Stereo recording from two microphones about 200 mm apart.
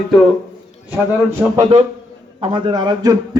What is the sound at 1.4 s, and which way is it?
Speech, centre (ahead or behind).